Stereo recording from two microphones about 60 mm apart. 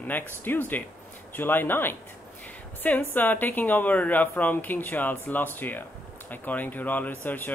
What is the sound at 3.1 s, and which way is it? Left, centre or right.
Speech, left.